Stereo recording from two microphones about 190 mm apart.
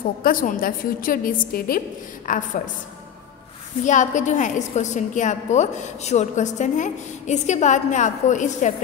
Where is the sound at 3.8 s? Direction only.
40° left (ahead or behind).